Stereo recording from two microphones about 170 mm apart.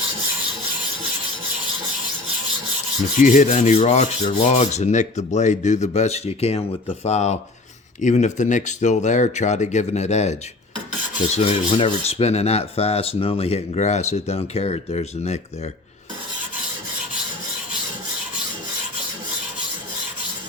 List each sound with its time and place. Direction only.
3.2 s rub: 45° left (ahead or behind)
11.3 s rub: 30° left (ahead or behind)